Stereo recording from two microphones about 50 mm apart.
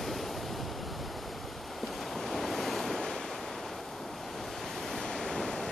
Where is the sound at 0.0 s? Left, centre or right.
Centre.